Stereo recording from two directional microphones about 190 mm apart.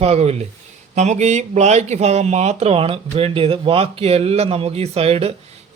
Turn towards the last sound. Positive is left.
turn(degrees=-30)  # may be behind; listen again after turning